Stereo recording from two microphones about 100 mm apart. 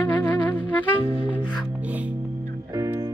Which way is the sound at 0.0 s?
15° left (ahead or behind).